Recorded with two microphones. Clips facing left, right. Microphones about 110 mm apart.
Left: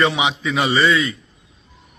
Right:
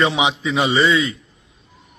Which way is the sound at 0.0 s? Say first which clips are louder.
Even; 15° right (ahead or behind).